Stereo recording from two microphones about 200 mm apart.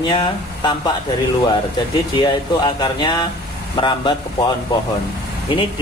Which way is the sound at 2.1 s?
20° left (ahead or behind).